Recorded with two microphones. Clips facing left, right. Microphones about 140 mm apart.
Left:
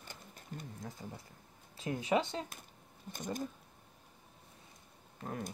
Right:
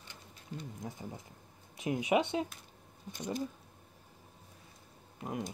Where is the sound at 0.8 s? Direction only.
15° right (ahead or behind).